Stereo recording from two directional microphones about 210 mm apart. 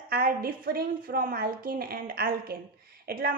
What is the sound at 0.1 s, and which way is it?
A woman's voice, 45° right (ahead or behind).